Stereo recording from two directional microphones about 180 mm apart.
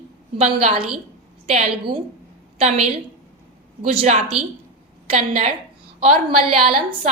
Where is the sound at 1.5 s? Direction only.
30° right (ahead or behind).